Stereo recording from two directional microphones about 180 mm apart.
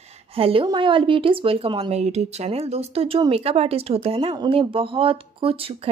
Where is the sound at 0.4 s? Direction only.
30° right (ahead or behind).